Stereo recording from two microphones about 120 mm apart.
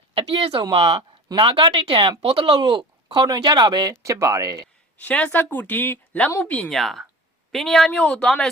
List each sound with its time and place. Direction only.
0.1 s a sound: 45° right (ahead or behind)
0.6 s speech: 45° right (ahead or behind); by 4.5 s 25° right (ahead or behind)
4.9 s a woman's voice: 10° left (ahead or behind)